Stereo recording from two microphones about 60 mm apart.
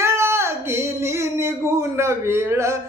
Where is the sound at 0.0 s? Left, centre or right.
Right.